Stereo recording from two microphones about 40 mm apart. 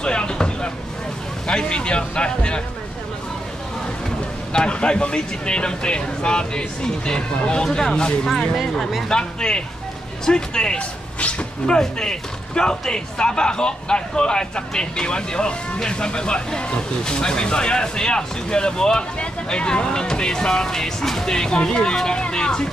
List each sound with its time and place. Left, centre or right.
0.0 s vehicle: left
1.5 s speech: left
4.6 s speech: left
9.1 s speech: left
10.8 s a sound: left
11.6 s speech: centre